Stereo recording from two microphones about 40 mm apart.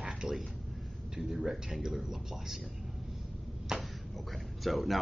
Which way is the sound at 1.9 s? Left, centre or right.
Centre.